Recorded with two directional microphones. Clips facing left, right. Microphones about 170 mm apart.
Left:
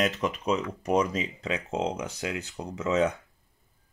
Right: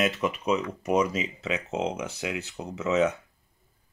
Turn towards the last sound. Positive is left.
turn(degrees=35)  # may be behind; listen again after turning